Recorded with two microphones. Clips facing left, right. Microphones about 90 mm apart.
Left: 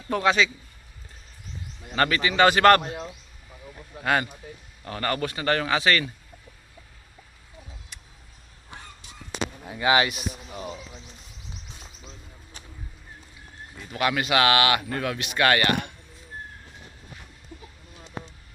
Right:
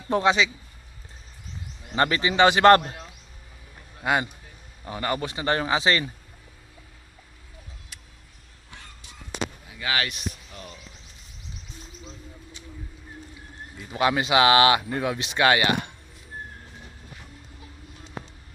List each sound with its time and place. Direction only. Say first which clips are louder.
0.1 s speech: right 1 dB; 25° right (ahead or behind)
2.0 s speech: right 1 dB; 25° right (ahead or behind)
4.0 s speech: even; 15° right (ahead or behind)
9.8 s speech: left 7 dB; 25° left (ahead or behind)
10.1 s speech: left 2 dB; 10° left (ahead or behind)
13.9 s speech: right 2 dB; 25° right (ahead or behind)